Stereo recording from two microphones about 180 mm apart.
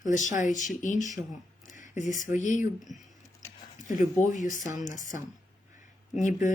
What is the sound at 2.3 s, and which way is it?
Speech, 45° left (ahead or behind).